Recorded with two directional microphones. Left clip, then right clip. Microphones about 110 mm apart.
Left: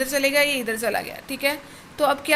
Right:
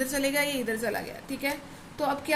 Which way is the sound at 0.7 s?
60° left (ahead or behind).